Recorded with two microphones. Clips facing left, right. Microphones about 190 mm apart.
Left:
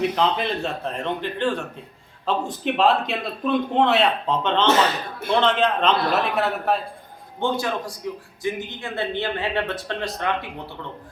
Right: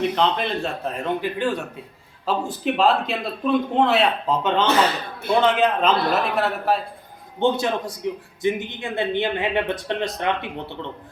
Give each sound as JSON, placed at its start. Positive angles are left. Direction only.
{"t": 0.2, "sound": "a man's voice", "side_deg": 0}
{"t": 7.3, "sound": "speech", "side_deg": -20}